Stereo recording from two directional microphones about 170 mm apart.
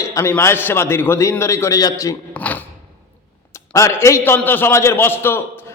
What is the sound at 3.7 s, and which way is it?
A man's voice, 15° left (ahead or behind).